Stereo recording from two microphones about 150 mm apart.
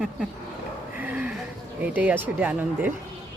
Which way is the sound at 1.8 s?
10° right (ahead or behind).